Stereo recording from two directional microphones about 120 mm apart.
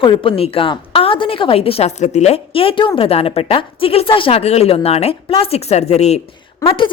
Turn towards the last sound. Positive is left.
turn(degrees=45)  # may be behind; listen again after turning